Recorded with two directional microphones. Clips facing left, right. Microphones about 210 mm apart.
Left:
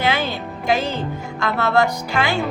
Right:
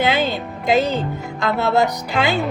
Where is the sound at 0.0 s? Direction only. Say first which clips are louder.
Right 3 dB; 20° right (ahead or behind).